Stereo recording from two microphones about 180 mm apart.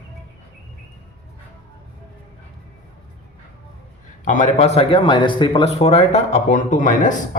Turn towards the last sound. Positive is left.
turn(degrees=45)  # may be behind; listen again after turning